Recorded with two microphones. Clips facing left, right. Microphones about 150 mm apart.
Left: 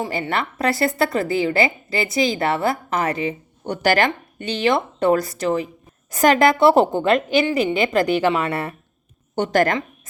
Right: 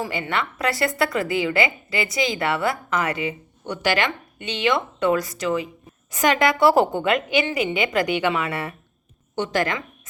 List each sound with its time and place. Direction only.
0.1 s a woman's voice: 35° left (ahead or behind)
9.3 s speech: 45° left (ahead or behind)